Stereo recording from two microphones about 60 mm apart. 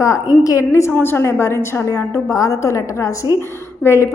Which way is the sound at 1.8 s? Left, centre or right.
Left.